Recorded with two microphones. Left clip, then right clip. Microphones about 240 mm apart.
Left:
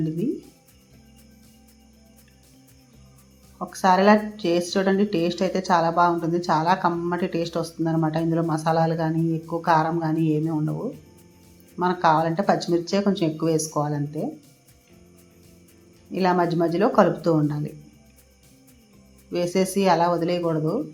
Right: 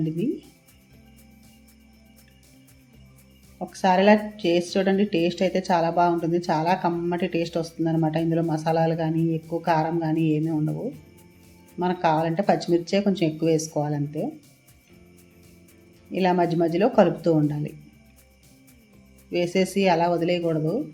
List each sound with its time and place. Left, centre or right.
3.7 s speech: centre
10.4 s speech: centre
16.1 s speech: centre
19.3 s speech: centre